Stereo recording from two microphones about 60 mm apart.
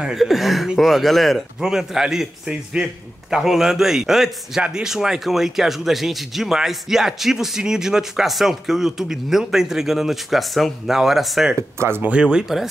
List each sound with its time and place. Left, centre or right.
0.0 s a man's voice: centre
12.0 s a man's voice: centre